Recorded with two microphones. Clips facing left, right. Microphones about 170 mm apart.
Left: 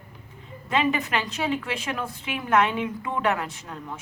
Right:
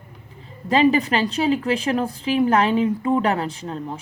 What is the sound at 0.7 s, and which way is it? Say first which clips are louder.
A woman's voice: right 7 dB; 35° right (ahead or behind).